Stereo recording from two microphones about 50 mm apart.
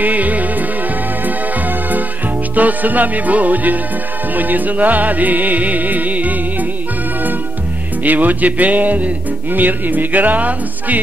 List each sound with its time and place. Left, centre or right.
0.0 s music: right
8.0 s music: right